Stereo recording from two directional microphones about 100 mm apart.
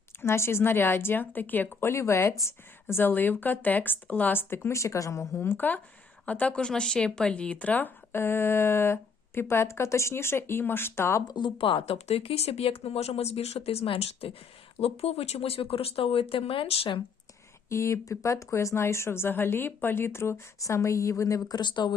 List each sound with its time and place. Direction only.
0.2 s speech: 25° left (ahead or behind)
11.3 s speech: 55° left (ahead or behind); by 14.3 s 75° left (ahead or behind)
14.8 s speech: 90° left; by 17.0 s 70° left (ahead or behind)
17.7 s speech: 30° left (ahead or behind); by 21.9 s 50° left (ahead or behind)